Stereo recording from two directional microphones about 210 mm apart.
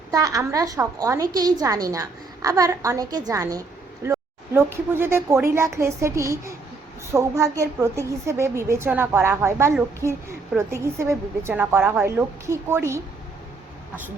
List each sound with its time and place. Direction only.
0.1 s a woman's voice: 15° right (ahead or behind)